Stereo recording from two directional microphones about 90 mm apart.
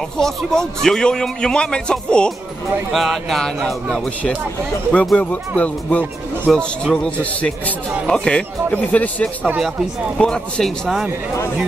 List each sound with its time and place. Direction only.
0.2 s a man's voice: 5° left (ahead or behind)
5.1 s a man's voice: 15° left (ahead or behind)
6.5 s a man's voice: 5° left (ahead or behind)